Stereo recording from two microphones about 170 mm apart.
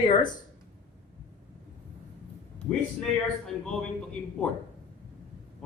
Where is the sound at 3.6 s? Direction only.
5° left (ahead or behind).